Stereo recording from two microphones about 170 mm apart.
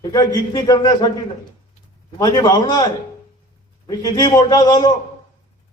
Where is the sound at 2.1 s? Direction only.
20° left (ahead or behind).